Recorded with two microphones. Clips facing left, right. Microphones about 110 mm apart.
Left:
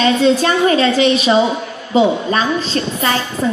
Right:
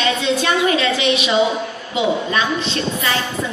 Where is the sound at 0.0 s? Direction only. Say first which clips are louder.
Left 6 dB; 35° left (ahead or behind).